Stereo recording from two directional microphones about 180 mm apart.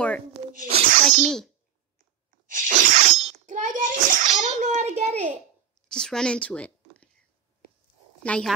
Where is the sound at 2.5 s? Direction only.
45° right (ahead or behind).